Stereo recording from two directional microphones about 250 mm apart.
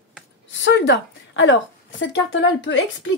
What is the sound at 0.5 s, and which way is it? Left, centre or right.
Speech, left.